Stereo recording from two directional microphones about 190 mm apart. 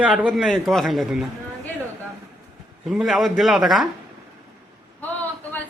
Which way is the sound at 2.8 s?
Centre (ahead or behind).